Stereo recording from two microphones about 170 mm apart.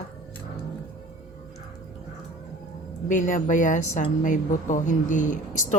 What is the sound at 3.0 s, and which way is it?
A woman's voice, 50° left (ahead or behind).